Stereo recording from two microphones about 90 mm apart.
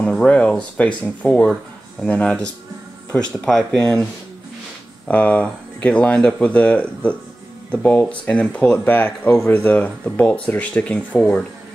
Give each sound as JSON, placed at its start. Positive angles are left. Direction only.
{"t": 0.0, "sound": "speech", "side_deg": 10}
{"t": 5.0, "sound": "speech", "side_deg": 15}